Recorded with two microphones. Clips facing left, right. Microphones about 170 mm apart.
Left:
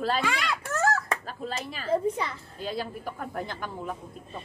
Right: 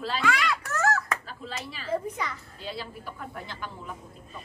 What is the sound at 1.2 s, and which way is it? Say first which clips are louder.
Chicken: left 4 dB; 45° left (ahead or behind).